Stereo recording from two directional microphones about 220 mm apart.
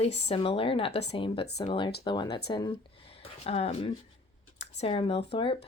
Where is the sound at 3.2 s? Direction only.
25° left (ahead or behind).